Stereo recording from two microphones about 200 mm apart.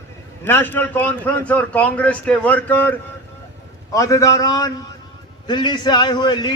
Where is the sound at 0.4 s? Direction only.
10° left (ahead or behind).